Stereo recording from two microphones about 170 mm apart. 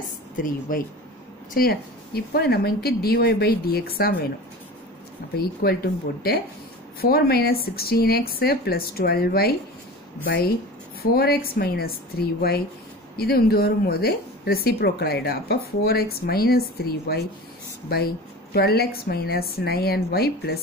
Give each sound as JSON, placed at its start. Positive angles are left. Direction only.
{"t": 0.4, "sound": "speech", "side_deg": 55}
{"t": 5.3, "sound": "speech", "side_deg": 65}
{"t": 7.0, "sound": "speech", "side_deg": 65}